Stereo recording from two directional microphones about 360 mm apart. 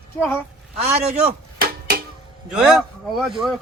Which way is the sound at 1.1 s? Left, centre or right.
Right.